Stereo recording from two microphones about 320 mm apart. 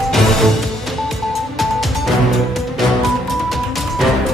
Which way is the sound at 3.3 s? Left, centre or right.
Centre.